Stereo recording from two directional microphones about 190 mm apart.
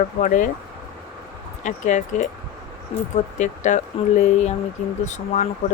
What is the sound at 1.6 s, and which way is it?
Speech, 40° left (ahead or behind).